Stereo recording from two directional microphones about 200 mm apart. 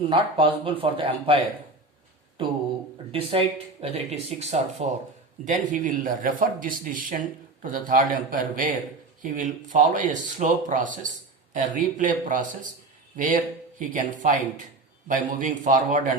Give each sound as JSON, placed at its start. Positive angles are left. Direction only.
{"t": 0.1, "sound": "speech", "side_deg": -25}
{"t": 2.4, "sound": "speech", "side_deg": -25}